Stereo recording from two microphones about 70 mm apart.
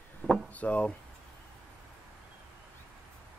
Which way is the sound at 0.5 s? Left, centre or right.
Centre.